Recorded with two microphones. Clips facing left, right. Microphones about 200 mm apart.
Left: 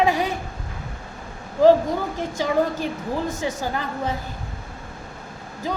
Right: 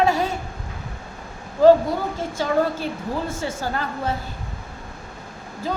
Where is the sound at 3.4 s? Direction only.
15° left (ahead or behind).